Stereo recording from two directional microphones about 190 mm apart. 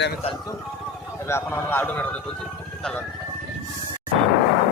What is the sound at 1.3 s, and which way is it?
Speech, 15° left (ahead or behind).